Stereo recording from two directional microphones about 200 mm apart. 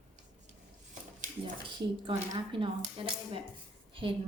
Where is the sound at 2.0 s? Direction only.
25° right (ahead or behind).